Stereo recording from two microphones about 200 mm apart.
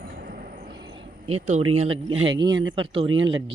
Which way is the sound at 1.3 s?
35° right (ahead or behind).